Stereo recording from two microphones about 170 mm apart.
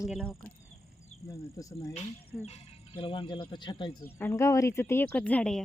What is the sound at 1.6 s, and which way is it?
Speech, 20° left (ahead or behind).